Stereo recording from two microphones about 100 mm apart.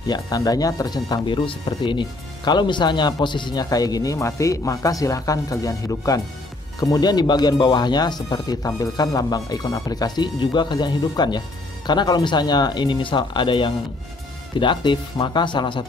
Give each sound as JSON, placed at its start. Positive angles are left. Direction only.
{"t": 0.1, "sound": "speech", "side_deg": 40}